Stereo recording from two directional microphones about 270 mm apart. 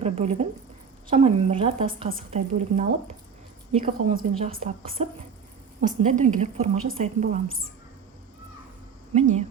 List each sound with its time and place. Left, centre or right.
0.0 s a sound: right
1.0 s a woman's voice: right
9.1 s a woman's voice: right